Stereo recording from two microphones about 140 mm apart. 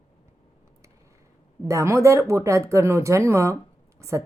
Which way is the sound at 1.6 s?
20° right (ahead or behind).